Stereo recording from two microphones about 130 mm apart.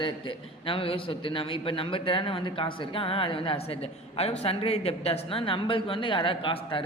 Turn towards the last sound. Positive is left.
turn(degrees=40)  # may be behind; listen again after turning